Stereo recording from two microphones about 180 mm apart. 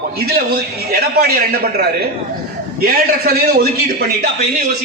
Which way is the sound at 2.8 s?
55° right (ahead or behind).